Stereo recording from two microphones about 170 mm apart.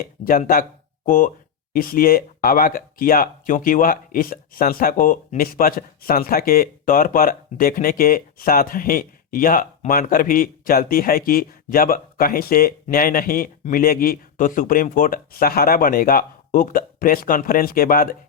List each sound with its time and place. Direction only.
0.0 s speech: 55° left (ahead or behind)